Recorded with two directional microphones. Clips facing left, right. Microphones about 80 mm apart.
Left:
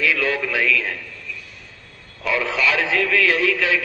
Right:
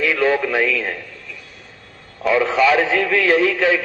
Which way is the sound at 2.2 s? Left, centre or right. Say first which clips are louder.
Right 6 dB; right.